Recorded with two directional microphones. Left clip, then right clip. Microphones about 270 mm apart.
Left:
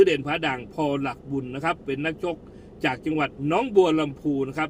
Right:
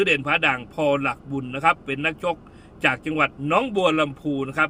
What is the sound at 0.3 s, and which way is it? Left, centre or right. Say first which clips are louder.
A man's voice: right 6 dB; centre.